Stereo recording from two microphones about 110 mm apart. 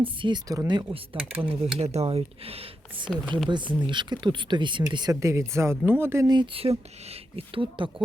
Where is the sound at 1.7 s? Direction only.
75° right (ahead or behind); by 5.1 s 45° right (ahead or behind).